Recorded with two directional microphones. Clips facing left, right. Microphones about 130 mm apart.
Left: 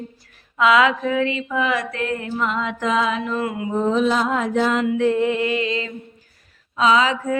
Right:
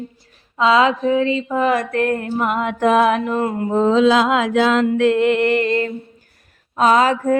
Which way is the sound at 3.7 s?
90° right.